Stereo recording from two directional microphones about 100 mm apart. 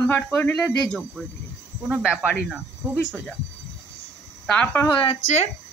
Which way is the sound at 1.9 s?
5° right (ahead or behind).